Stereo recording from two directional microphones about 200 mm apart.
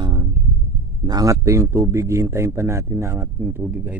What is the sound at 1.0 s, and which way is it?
A man's voice, 20° right (ahead or behind).